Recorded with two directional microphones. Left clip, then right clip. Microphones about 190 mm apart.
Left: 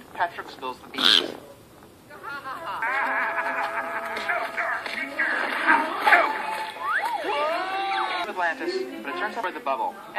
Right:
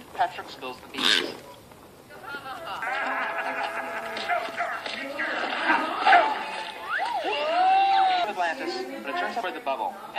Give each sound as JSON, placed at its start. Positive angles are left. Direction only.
{"t": 0.2, "sound": "speech", "side_deg": 45}
{"t": 2.2, "sound": "a sound", "side_deg": 40}
{"t": 9.0, "sound": "a woman's voice", "side_deg": 40}